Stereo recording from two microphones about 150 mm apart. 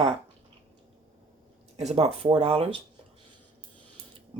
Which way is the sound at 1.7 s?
45° right (ahead or behind).